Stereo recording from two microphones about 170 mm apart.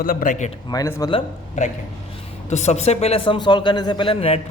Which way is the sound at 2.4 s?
40° left (ahead or behind).